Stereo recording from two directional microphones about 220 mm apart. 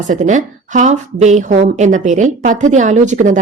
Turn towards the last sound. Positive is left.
turn(degrees=-35)  # may be behind; listen again after turning